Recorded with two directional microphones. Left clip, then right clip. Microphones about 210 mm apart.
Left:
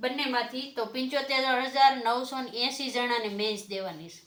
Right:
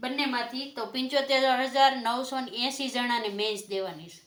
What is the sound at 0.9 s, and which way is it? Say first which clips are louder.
A woman's voice: right 4 dB; 40° right (ahead or behind).